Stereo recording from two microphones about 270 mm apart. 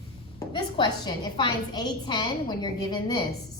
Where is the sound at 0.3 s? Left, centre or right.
Centre.